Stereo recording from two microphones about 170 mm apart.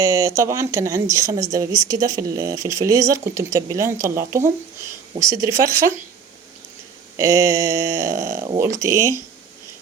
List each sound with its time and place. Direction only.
0.0 s speech: 15° right (ahead or behind)
7.2 s speech: 15° right (ahead or behind)